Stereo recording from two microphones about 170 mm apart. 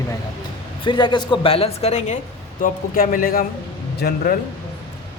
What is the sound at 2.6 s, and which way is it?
Speech, 55° left (ahead or behind).